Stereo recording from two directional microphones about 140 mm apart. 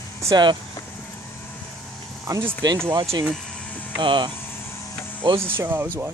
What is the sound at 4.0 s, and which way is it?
Speech, 35° right (ahead or behind).